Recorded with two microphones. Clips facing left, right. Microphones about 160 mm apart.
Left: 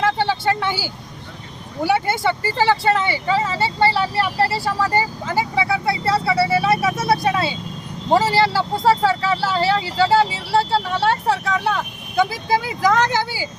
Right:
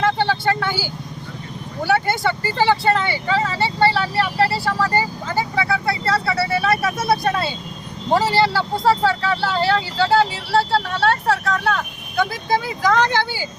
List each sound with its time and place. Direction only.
0.0 s vehicle: 10° left (ahead or behind)
1.8 s speech: 15° left (ahead or behind)